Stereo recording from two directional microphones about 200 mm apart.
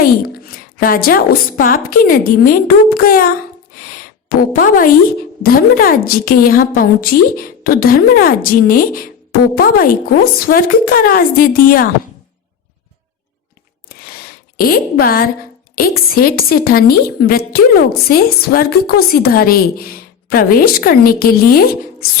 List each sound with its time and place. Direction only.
0.0 s a woman's voice: 45° left (ahead or behind)
4.5 s a woman's voice: 45° left (ahead or behind)
14.5 s a woman's voice: 45° left (ahead or behind)